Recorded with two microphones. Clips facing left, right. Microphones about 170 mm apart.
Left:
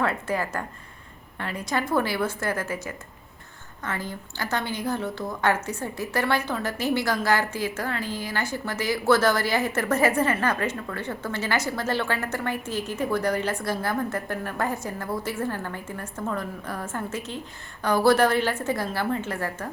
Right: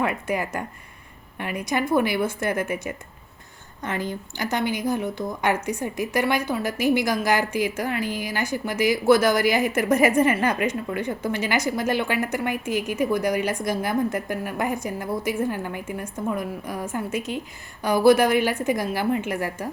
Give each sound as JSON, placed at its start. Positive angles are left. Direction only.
{"t": 0.0, "sound": "a woman's voice", "side_deg": -15}